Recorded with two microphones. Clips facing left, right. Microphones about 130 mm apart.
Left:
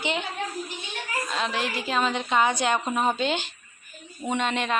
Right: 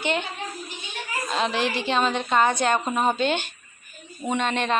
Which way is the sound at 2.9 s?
15° right (ahead or behind).